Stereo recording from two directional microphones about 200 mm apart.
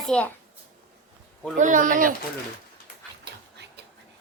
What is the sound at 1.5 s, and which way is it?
Speech, 40° right (ahead or behind).